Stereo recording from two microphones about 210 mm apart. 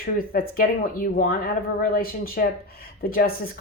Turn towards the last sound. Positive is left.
turn(degrees=45)  # may be behind; listen again after turning